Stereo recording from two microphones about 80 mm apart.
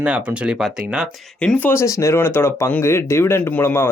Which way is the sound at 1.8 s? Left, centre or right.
Left.